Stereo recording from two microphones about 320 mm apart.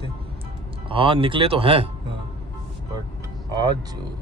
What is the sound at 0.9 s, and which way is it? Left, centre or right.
Speech, centre.